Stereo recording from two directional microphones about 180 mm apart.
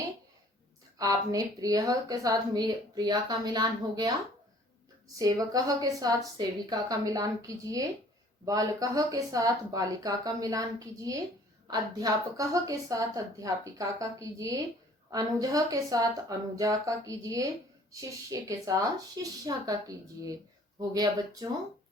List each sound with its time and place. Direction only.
0.9 s a woman's voice: 20° right (ahead or behind)
5.1 s a woman's voice: 20° right (ahead or behind)